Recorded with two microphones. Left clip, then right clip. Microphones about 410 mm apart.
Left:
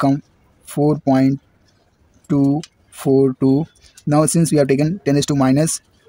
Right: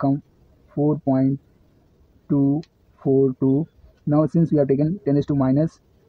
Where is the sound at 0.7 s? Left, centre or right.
Right.